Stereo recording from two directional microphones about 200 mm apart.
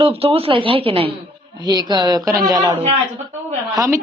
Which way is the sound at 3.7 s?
15° right (ahead or behind).